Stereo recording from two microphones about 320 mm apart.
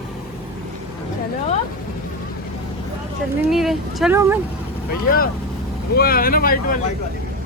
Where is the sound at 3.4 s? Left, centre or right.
Centre.